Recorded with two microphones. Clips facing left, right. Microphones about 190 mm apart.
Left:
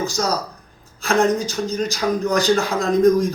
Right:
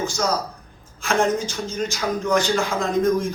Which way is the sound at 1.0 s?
35° left (ahead or behind).